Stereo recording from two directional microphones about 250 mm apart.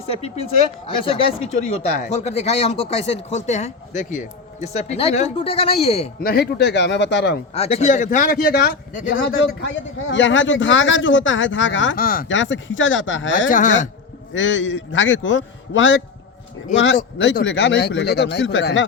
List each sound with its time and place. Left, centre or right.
0.9 s speech: left
6.2 s speech: left
7.5 s speech: left
11.9 s speech: left
12.3 s speech: left
13.5 s speech: left
14.3 s speech: left